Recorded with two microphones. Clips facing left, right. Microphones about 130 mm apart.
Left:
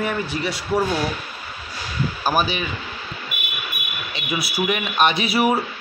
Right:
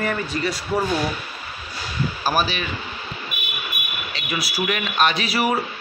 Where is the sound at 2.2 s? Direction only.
15° left (ahead or behind).